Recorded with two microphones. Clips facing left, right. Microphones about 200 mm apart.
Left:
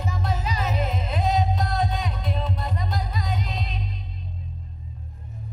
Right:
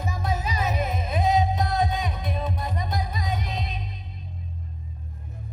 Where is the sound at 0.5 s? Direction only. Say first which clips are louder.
Even; 15° right (ahead or behind).